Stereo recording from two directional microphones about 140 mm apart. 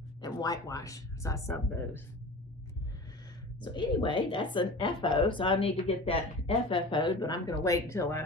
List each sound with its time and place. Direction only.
0.2 s speech: 25° left (ahead or behind)
3.6 s a woman's voice: 35° left (ahead or behind)